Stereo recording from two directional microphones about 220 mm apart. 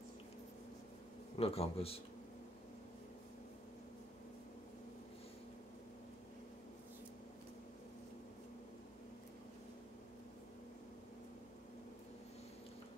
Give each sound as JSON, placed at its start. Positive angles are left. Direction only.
{"t": 1.3, "sound": "a man's voice", "side_deg": 25}